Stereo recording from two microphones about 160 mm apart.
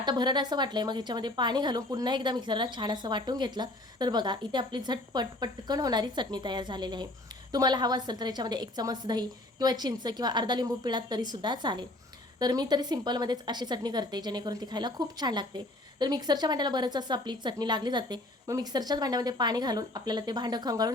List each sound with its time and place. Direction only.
0.0 s a woman's voice: 25° right (ahead or behind)